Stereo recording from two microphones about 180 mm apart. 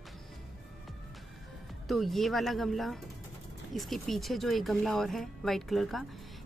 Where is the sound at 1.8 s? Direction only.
Centre (ahead or behind).